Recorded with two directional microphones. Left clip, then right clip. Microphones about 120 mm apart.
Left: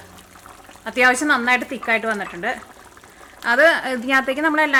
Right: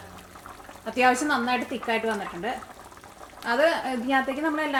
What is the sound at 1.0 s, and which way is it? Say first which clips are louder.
A woman's voice: left 6 dB; 45° left (ahead or behind).